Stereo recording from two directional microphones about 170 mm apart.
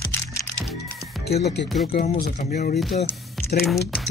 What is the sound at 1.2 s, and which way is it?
Speech, 75° left (ahead or behind).